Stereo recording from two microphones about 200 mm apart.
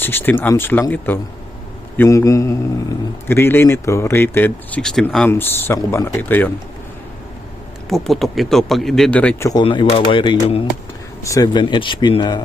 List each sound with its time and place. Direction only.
0.0 s speech: 10° left (ahead or behind)
7.9 s speech: centre (ahead or behind)
9.5 s speech: 20° left (ahead or behind)